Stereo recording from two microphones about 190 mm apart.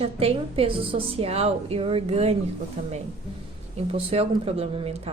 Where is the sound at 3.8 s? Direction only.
30° right (ahead or behind).